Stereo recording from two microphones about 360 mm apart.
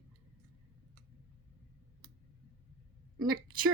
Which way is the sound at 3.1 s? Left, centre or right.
Centre.